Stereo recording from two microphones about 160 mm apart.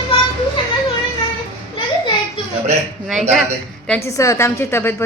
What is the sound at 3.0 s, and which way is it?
Speech, centre (ahead or behind).